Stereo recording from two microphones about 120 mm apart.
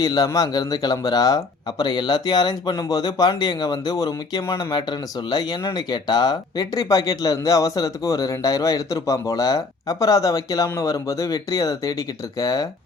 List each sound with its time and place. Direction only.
0.0 s speech: 30° left (ahead or behind)